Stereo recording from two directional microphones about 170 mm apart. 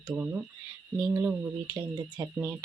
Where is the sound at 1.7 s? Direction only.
25° right (ahead or behind).